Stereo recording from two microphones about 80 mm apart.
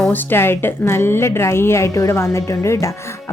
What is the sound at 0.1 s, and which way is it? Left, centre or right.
A woman's voice, left.